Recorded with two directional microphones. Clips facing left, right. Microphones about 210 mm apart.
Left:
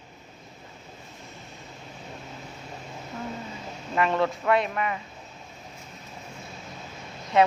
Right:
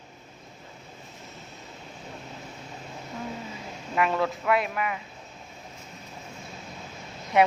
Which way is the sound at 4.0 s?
5° right (ahead or behind).